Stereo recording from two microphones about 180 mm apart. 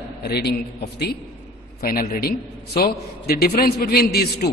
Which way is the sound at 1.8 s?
55° left (ahead or behind).